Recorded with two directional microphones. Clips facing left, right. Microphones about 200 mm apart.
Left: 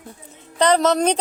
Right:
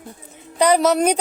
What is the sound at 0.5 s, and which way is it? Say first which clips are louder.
Speech: right 1 dB; 10° right (ahead or behind).